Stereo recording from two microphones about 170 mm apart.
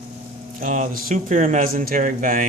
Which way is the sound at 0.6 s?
50° right (ahead or behind).